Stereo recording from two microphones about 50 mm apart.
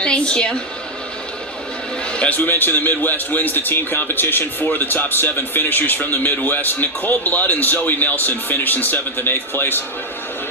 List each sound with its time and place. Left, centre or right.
0.0 s a sound: left
2.1 s a man's voice: left
2.4 s a man's voice: left